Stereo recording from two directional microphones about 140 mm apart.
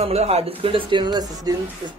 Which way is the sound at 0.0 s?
45° right (ahead or behind).